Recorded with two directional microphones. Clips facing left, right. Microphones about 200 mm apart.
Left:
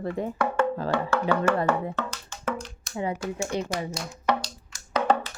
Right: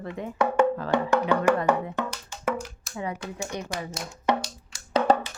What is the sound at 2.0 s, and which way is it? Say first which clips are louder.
Music: right 2 dB; 15° right (ahead or behind).